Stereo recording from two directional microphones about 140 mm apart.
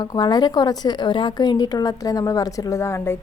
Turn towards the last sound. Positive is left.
turn(degrees=20)  # may be behind; listen again after turning